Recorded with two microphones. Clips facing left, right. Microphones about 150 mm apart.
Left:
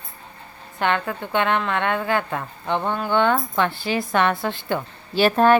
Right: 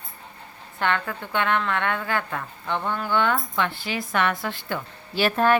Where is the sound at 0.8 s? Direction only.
20° left (ahead or behind).